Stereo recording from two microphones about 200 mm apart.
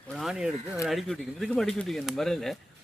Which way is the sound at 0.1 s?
Centre (ahead or behind).